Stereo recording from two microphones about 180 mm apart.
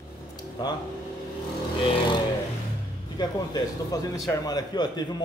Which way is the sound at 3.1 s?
20° left (ahead or behind).